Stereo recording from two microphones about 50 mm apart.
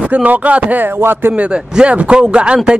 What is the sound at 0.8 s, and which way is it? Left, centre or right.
Speech, right.